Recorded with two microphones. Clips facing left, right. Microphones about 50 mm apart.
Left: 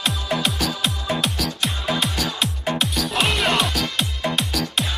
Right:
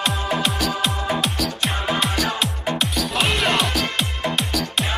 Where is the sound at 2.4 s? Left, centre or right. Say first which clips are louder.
Even; centre.